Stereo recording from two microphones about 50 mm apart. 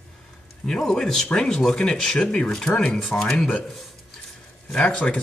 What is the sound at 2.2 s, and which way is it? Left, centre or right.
Speech, left.